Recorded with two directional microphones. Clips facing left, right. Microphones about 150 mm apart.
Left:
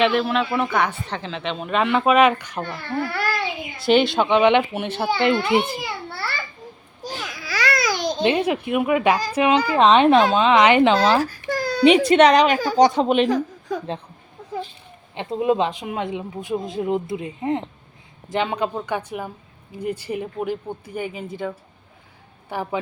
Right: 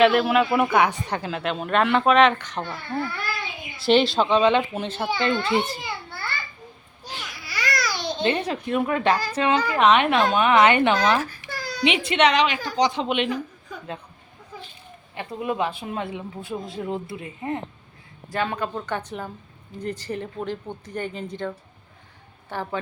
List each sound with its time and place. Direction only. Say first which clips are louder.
0.0 s speech: right 2 dB; 5° right (ahead or behind)
3.0 s babbling: left 8 dB; 80° left
3.8 s speech: left 1 dB; centre (ahead or behind)
4.2 s speech: left 3 dB; 20° left (ahead or behind)
5.8 s children playing: left 4 dB; 80° left
7.0 s baby cry: left 6 dB; 90° left
7.4 s babbling: left 5 dB; 85° left
7.9 s babbling: left 5 dB; 40° left (ahead or behind)
8.2 s speech: left 4 dB; 10° left (ahead or behind)
9.6 s a child's voice: left 5 dB; 30° left (ahead or behind)
13.3 s a sound: left 8 dB; 90° left
15.1 s speech: left 7 dB; 20° left (ahead or behind)